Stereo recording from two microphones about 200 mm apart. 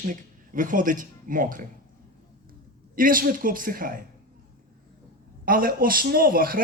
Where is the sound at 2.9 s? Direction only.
45° right (ahead or behind).